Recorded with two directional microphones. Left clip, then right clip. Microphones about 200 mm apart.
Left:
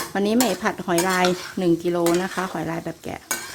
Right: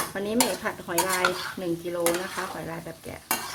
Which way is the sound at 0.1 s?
60° left (ahead or behind).